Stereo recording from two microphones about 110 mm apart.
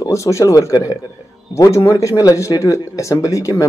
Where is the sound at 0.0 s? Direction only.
30° left (ahead or behind).